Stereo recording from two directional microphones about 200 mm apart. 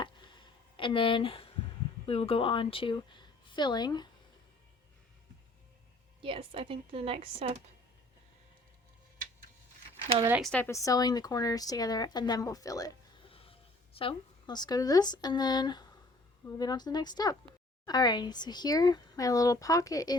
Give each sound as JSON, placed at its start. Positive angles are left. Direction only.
{"t": 0.0, "sound": "a sound", "side_deg": 25}
{"t": 2.0, "sound": "a woman's voice", "side_deg": 30}
{"t": 6.2, "sound": "speech", "side_deg": -25}
{"t": 10.4, "sound": "speech", "side_deg": 5}